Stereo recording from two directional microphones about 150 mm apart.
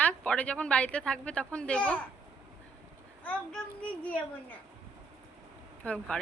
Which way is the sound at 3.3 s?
10° left (ahead or behind).